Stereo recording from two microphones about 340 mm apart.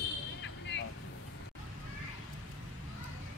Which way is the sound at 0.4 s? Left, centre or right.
Left.